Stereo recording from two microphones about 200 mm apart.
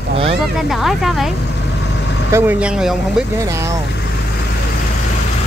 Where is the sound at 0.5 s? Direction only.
Centre (ahead or behind).